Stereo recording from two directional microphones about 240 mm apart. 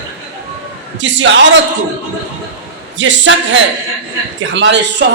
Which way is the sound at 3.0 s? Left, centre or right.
Right.